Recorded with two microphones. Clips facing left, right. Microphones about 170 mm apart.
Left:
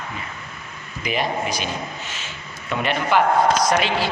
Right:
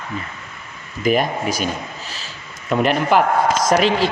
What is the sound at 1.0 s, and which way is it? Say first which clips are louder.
Speech: right 7 dB; 45° right (ahead or behind).